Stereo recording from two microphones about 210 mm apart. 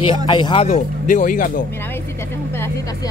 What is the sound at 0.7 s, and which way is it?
Speech, 40° left (ahead or behind).